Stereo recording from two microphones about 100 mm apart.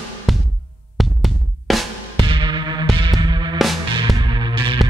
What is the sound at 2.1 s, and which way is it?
Music, 55° right (ahead or behind).